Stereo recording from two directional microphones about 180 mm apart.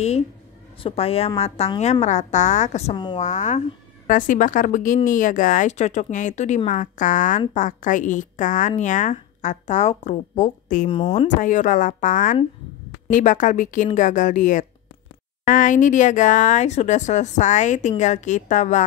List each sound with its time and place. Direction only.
0.8 s a woman's voice: 35° left (ahead or behind)
10.9 s speech: 30° left (ahead or behind)
11.4 s a woman's voice: 45° left (ahead or behind)